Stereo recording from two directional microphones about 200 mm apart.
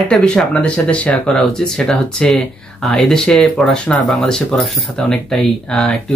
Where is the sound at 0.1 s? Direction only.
5° left (ahead or behind).